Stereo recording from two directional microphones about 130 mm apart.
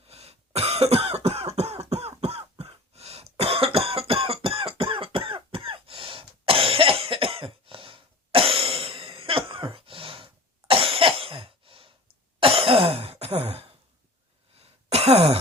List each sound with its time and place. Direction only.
0.1 s cough: 50° right (ahead or behind)
12.4 s throat clearing: 45° right (ahead or behind)
14.6 s a sound: 50° right (ahead or behind)